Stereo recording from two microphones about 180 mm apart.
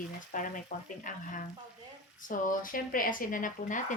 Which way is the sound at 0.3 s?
50° left (ahead or behind).